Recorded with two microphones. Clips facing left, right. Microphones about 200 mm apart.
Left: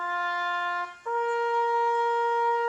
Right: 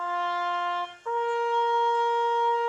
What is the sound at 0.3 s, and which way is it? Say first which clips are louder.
Shofar: right 3 dB; 5° left (ahead or behind).